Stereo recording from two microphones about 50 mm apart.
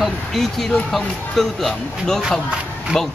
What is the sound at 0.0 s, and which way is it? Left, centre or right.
Speech, centre.